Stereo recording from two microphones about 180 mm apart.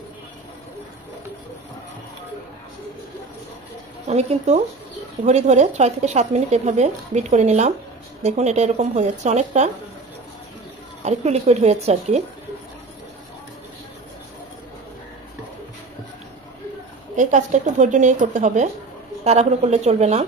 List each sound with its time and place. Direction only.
4.1 s speech: 35° right (ahead or behind)
11.0 s speech: 40° right (ahead or behind)
17.1 s speech: 40° right (ahead or behind)